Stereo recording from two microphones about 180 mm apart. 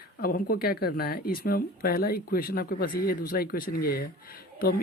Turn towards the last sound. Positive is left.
turn(degrees=55)  # may be behind; listen again after turning